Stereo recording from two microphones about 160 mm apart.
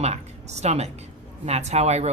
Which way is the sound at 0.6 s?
45° right (ahead or behind).